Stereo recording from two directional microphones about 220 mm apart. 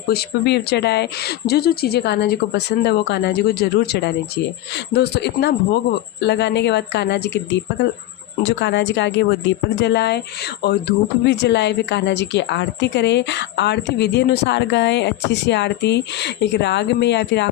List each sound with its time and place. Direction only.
0.1 s a woman's voice: 50° left (ahead or behind)